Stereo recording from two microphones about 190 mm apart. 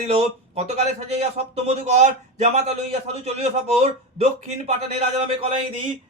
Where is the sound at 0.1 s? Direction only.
35° right (ahead or behind).